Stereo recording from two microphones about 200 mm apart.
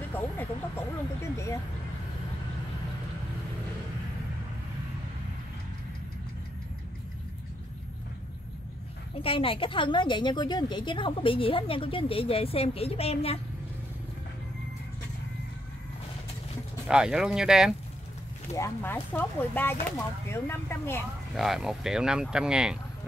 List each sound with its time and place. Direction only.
0.1 s vehicle: 10° left (ahead or behind)
1.3 s speech: 15° left (ahead or behind)
9.2 s a woman's voice: 25° left (ahead or behind)
16.8 s speech: 5° right (ahead or behind)
18.5 s speech: 10° left (ahead or behind)
21.4 s speech: centre (ahead or behind)